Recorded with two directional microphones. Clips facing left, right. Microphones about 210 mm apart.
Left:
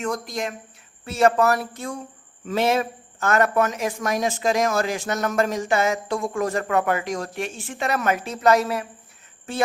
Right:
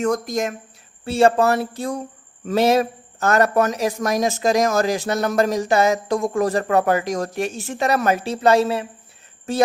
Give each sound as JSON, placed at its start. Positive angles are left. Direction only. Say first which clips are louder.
{"t": 0.0, "sound": "speech", "louder": "right 6 dB", "side_deg": -45}
{"t": 1.0, "sound": "a man's voice", "louder": "right 3 dB", "side_deg": -30}
{"t": 9.5, "sound": "a man's voice", "louder": "right 6 dB", "side_deg": -40}